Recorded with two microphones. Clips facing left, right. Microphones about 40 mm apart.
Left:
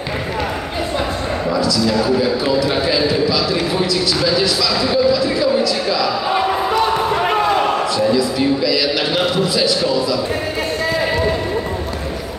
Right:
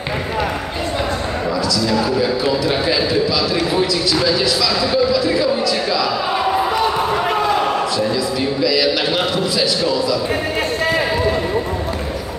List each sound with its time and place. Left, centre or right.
1.5 s a man's voice: centre
7.9 s a man's voice: centre